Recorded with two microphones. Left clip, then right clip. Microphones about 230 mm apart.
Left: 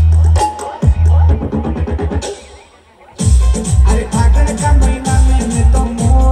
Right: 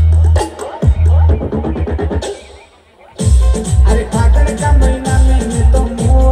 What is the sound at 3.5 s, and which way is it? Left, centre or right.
Music, left.